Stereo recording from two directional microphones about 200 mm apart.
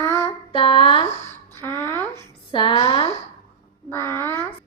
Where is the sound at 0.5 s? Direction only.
25° left (ahead or behind).